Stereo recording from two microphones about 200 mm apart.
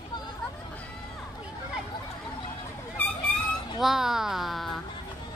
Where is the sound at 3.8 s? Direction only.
Centre (ahead or behind).